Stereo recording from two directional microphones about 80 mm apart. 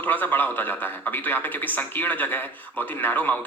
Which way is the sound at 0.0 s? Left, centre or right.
Left.